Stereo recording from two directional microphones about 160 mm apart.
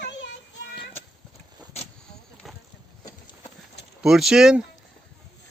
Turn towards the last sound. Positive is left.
turn(degrees=-5)  # may be behind; listen again after turning